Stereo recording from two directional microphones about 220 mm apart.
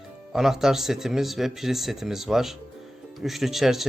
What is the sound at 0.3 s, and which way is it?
Speech, centre (ahead or behind).